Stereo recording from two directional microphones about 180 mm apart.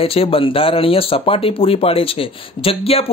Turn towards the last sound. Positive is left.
turn(degrees=30)  # may be behind; listen again after turning